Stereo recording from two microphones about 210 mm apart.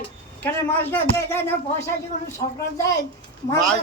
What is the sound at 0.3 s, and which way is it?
Speech, 10° left (ahead or behind).